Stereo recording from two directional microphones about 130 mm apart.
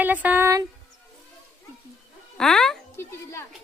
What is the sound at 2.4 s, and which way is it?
Speech, 5° left (ahead or behind).